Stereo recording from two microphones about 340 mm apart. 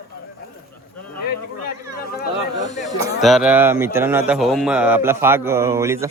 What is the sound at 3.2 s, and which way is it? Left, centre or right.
Speech, centre.